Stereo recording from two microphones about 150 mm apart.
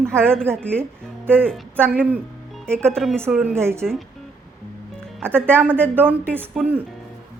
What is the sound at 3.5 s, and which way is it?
Speech, 15° right (ahead or behind).